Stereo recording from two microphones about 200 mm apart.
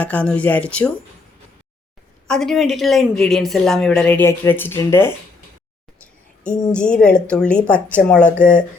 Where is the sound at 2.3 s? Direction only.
Centre (ahead or behind).